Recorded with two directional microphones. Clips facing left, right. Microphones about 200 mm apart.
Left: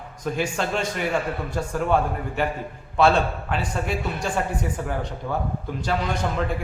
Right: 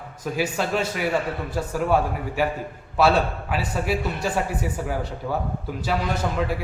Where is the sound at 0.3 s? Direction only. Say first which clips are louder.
Right 2 dB; 5° right (ahead or behind).